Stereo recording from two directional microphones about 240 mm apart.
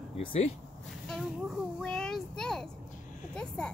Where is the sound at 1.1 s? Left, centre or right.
Centre.